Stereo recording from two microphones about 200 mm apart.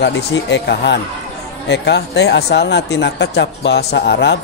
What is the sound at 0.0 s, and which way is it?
Speech, 65° left (ahead or behind).